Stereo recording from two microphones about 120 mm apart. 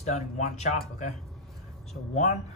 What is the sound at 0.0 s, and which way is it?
Speech, 75° left (ahead or behind).